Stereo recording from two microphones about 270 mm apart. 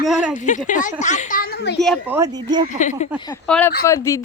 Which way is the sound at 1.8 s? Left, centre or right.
Centre.